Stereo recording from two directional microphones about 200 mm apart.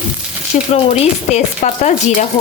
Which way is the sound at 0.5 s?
35° left (ahead or behind).